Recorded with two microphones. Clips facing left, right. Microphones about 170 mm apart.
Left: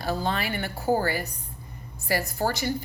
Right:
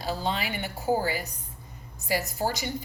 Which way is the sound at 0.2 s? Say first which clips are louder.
Left 2 dB; 15° right (ahead or behind).